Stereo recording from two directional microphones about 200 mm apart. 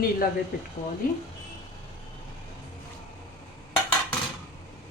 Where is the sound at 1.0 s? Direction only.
45° left (ahead or behind).